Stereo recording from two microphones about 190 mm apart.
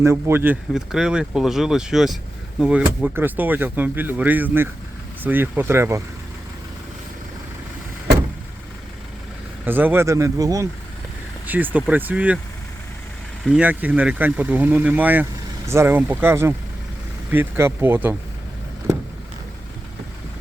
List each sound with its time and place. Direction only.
0.0 s speech: 15° right (ahead or behind)
9.6 s speech: 10° right (ahead or behind)
13.4 s speech: 5° right (ahead or behind)